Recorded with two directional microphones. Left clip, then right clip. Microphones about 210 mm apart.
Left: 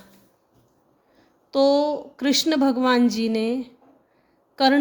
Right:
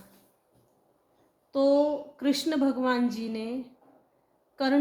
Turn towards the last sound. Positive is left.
turn(degrees=55)  # may be behind; listen again after turning